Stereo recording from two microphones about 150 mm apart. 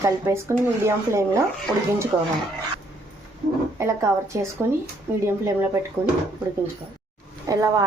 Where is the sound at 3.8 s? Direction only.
20° right (ahead or behind).